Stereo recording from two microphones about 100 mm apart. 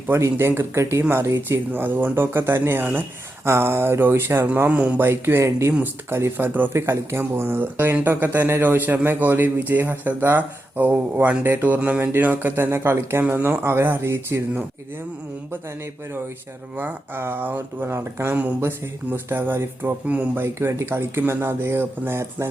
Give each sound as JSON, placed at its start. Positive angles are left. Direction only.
{"t": 0.1, "sound": "speech", "side_deg": -25}
{"t": 4.7, "sound": "speech", "side_deg": -15}
{"t": 16.7, "sound": "speech", "side_deg": -20}
{"t": 18.3, "sound": "speech", "side_deg": -15}